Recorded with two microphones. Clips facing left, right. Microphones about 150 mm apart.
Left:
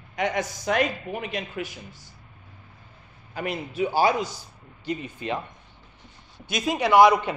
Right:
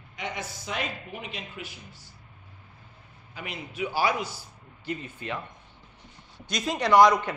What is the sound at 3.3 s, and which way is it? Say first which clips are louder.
Speech: left 9 dB; 40° left (ahead or behind).